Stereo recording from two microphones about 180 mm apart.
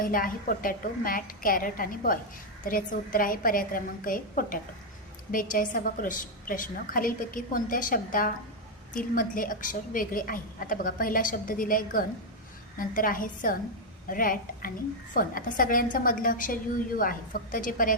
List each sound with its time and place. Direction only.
0.0 s a woman's voice: 50° left (ahead or behind)